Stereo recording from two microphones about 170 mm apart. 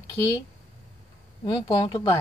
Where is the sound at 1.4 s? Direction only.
25° left (ahead or behind).